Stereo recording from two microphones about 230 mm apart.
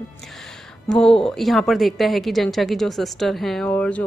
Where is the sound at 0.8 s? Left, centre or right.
Centre.